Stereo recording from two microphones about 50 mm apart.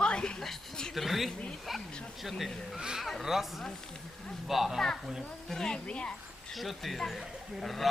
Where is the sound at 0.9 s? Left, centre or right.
Centre.